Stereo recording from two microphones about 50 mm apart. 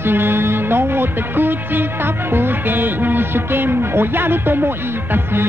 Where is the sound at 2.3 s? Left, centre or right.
Right.